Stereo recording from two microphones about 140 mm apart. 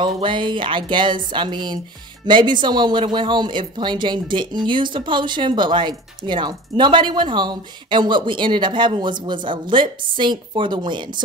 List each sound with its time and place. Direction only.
0.0 s speech: 35° right (ahead or behind)